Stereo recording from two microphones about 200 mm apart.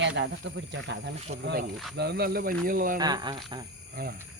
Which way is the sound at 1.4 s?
50° right (ahead or behind).